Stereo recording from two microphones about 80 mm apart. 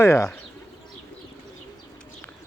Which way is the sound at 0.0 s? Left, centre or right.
Left.